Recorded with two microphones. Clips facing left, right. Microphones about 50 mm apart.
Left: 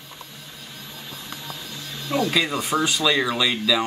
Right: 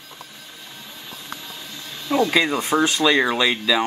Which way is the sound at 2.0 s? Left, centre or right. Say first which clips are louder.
Right 4 dB; right.